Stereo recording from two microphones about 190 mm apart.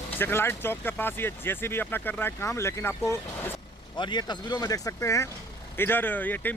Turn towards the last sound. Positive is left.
turn(degrees=10)  # may be behind; listen again after turning